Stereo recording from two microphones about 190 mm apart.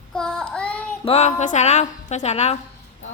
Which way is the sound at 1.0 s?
35° left (ahead or behind).